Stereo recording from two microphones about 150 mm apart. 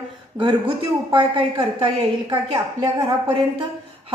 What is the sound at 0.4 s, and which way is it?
A woman's voice, 35° right (ahead or behind).